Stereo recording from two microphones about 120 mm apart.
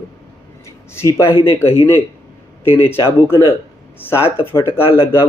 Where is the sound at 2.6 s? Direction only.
20° left (ahead or behind).